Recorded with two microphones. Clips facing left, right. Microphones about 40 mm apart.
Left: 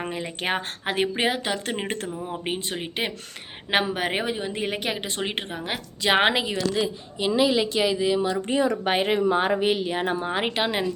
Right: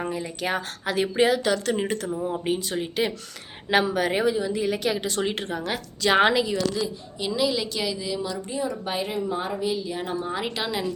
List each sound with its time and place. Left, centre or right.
0.1 s a woman's voice: left
4.8 s a woman's voice: left
8.4 s speech: left